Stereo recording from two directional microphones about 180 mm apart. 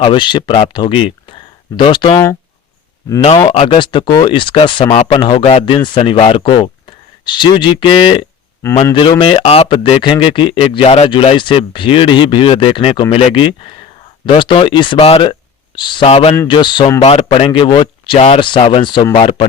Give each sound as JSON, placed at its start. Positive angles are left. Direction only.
{"t": 0.0, "sound": "a man's voice", "side_deg": 30}